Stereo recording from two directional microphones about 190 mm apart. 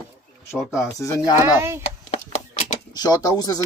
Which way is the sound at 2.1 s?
40° left (ahead or behind).